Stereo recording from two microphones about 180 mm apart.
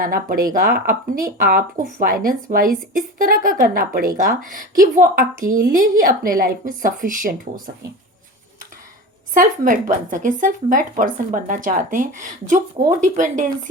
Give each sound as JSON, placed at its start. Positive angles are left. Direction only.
{"t": 0.0, "sound": "speech", "side_deg": -55}
{"t": 9.3, "sound": "speech", "side_deg": -50}